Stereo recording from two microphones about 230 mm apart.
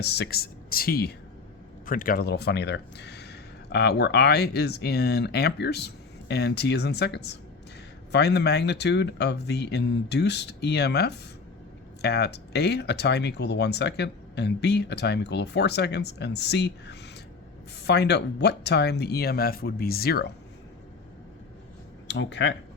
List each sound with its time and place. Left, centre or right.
0.0 s speech: left
22.0 s speech: left